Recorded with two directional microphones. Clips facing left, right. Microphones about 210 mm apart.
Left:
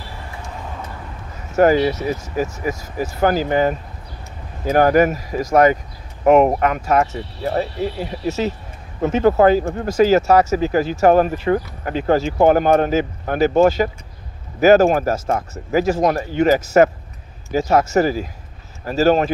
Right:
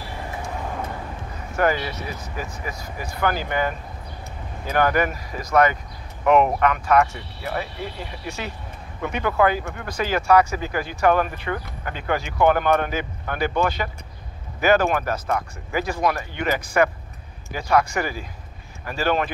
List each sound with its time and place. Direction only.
1.5 s speech: 40° left (ahead or behind)
4.7 s speech: 40° left (ahead or behind)